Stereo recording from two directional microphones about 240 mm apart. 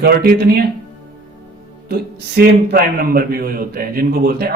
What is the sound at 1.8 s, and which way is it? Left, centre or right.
A man's voice, right.